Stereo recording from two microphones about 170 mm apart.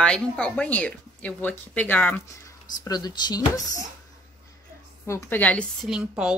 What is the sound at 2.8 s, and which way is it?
Speech, 25° left (ahead or behind).